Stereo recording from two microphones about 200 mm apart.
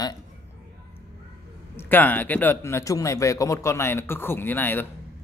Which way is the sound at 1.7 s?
10° left (ahead or behind).